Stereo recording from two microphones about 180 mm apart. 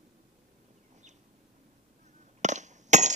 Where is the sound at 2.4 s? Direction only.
40° right (ahead or behind).